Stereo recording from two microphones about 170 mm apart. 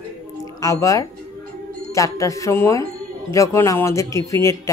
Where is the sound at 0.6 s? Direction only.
20° left (ahead or behind).